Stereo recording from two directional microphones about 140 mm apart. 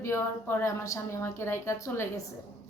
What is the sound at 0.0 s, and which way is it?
A woman's voice, 20° left (ahead or behind).